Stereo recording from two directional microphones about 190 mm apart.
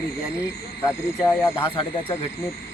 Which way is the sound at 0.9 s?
15° left (ahead or behind).